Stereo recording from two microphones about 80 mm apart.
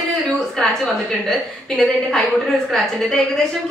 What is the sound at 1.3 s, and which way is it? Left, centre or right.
Speech, centre.